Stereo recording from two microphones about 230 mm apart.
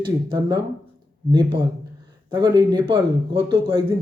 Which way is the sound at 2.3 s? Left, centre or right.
Centre.